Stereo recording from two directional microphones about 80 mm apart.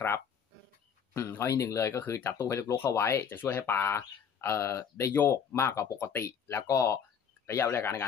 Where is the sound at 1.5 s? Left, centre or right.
Left.